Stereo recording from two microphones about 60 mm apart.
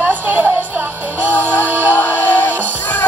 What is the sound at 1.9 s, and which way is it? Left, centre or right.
Music, left.